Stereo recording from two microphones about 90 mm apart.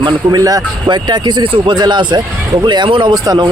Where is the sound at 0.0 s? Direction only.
50° right (ahead or behind).